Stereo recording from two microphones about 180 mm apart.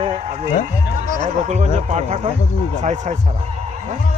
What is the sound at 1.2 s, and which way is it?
A man's voice, 40° right (ahead or behind).